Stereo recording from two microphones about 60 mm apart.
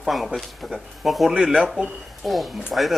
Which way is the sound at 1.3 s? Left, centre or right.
Centre.